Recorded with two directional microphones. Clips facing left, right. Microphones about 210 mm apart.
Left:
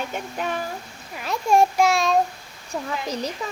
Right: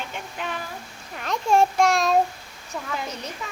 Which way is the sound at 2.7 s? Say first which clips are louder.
Left 4 dB; 35° left (ahead or behind).